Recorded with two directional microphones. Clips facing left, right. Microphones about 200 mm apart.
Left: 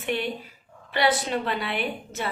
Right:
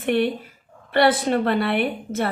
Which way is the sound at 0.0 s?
55° right (ahead or behind).